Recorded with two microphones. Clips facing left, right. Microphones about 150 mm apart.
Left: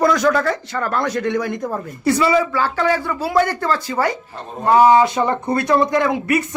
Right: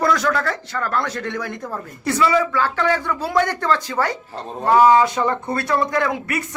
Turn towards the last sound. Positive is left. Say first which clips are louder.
# left 4 dB
turn(degrees=20)  # may be behind; listen again after turning